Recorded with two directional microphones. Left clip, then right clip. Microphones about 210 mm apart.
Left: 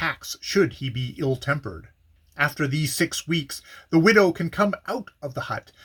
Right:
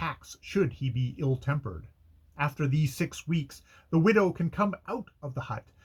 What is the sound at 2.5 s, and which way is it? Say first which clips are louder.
Speech: left 8 dB; 10° left (ahead or behind).